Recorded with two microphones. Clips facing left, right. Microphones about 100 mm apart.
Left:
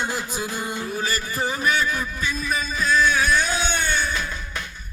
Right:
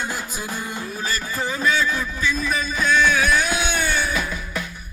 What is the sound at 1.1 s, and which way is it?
Music, 15° left (ahead or behind).